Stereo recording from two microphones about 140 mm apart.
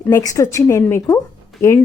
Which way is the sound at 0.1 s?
20° left (ahead or behind).